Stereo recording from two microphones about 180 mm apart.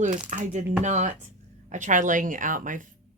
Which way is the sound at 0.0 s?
45° right (ahead or behind).